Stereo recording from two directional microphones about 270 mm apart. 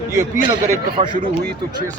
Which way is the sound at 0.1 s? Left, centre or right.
Centre.